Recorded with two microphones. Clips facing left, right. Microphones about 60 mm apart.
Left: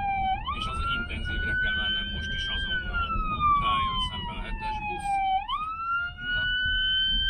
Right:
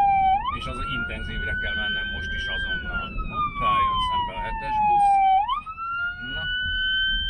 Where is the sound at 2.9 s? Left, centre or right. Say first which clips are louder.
Even; centre.